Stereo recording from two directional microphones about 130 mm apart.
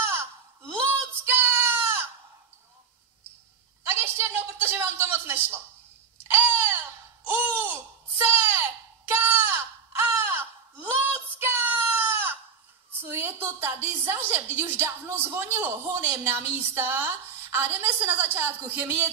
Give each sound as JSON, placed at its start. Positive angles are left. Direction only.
{"t": 1.0, "sound": "child singing", "side_deg": -20}
{"t": 3.8, "sound": "a sound", "side_deg": -20}
{"t": 13.0, "sound": "a woman's voice", "side_deg": -20}